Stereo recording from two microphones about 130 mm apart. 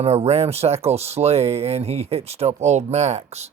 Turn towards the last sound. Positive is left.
turn(degrees=-55)  # may be behind; listen again after turning